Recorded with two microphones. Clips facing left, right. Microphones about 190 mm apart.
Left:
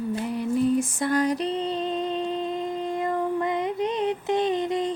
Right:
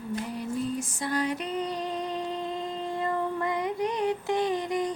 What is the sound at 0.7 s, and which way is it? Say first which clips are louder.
Music: left 6 dB; 50° left (ahead or behind).